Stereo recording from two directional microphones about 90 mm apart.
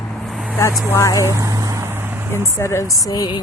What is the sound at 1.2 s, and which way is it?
Vehicle, 35° right (ahead or behind).